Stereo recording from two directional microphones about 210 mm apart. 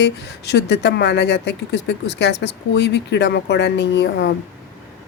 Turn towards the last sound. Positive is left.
turn(degrees=55)  # may be behind; listen again after turning